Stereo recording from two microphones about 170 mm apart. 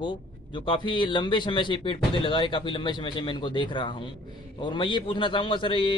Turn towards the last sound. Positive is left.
turn(degrees=30)  # may be behind; listen again after turning